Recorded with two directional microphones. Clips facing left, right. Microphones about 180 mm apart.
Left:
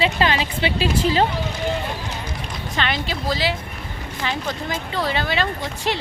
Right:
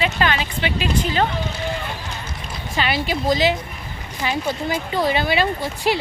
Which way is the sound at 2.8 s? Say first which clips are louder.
Right 3 dB; 10° right (ahead or behind).